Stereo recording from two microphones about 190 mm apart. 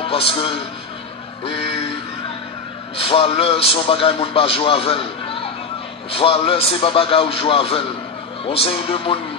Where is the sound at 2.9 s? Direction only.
30° left (ahead or behind).